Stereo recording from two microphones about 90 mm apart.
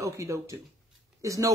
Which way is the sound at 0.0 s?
35° right (ahead or behind).